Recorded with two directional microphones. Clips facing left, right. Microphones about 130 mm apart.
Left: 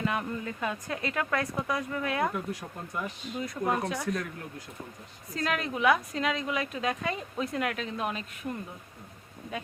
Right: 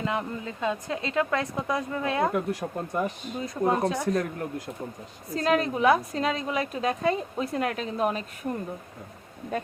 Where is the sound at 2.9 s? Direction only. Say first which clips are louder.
Right 3 dB; 35° right (ahead or behind).